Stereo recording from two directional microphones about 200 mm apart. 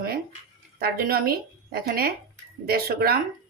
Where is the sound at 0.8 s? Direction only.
50° right (ahead or behind).